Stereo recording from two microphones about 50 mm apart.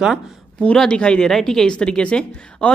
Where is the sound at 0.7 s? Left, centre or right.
Centre.